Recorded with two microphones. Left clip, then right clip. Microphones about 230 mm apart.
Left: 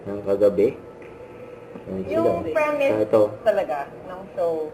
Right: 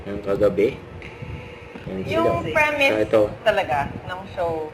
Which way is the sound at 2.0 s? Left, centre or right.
Centre.